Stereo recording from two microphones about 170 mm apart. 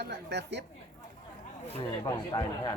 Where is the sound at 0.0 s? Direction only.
85° right.